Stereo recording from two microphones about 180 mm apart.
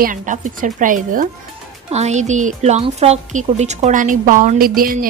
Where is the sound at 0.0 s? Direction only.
45° right (ahead or behind).